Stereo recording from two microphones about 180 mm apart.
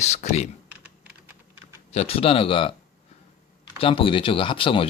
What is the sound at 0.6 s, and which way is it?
Typing, 10° right (ahead or behind).